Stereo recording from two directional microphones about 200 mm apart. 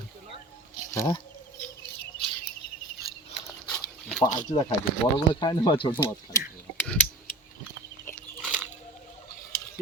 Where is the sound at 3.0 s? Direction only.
20° right (ahead or behind).